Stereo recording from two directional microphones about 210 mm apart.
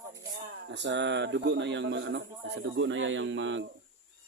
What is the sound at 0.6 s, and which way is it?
Speech, 55° right (ahead or behind).